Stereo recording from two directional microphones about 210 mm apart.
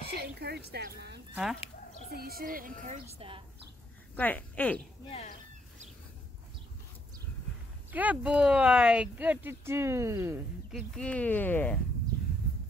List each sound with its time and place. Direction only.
0.1 s speech: 50° right (ahead or behind)
1.3 s chicken: centre (ahead or behind)
2.1 s a woman's voice: 45° right (ahead or behind); by 3.4 s 25° right (ahead or behind)
4.2 s speech: 10° left (ahead or behind)
7.9 s speech: 5° right (ahead or behind); by 11.8 s 10° left (ahead or behind)